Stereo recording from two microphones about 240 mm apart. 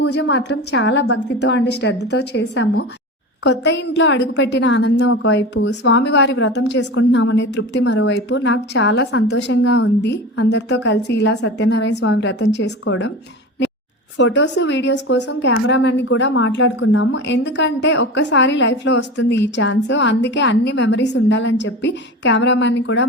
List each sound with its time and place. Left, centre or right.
0.1 s a woman's voice: left
14.2 s a woman's voice: left